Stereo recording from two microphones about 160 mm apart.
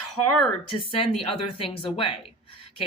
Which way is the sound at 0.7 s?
35° left (ahead or behind).